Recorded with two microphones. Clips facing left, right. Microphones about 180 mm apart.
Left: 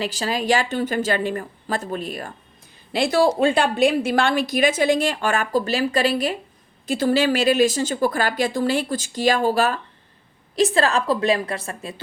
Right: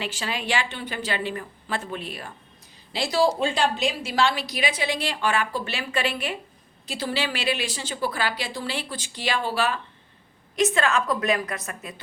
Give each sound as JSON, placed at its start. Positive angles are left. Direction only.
{"t": 0.0, "sound": "a woman's voice", "side_deg": 40}
{"t": 2.9, "sound": "a woman's voice", "side_deg": 55}
{"t": 6.8, "sound": "a woman's voice", "side_deg": 50}